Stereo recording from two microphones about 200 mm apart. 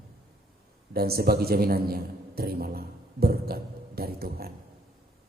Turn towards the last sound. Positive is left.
turn(degrees=-50)  # may be behind; listen again after turning